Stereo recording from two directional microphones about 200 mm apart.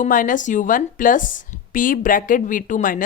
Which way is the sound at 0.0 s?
40° left (ahead or behind).